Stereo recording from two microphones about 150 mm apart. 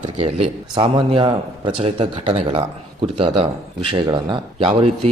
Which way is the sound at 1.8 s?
45° right (ahead or behind).